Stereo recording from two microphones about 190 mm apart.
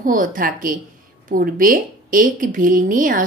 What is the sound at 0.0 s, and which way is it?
A woman's voice, 45° right (ahead or behind).